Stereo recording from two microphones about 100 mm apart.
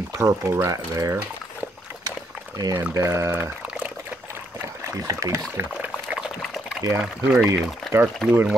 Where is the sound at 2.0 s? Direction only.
40° right (ahead or behind).